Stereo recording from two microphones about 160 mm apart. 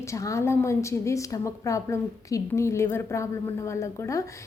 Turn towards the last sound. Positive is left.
turn(degrees=20)  # may be behind; listen again after turning